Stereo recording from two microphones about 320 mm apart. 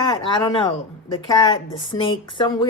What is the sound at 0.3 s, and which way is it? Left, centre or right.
A woman's voice, centre.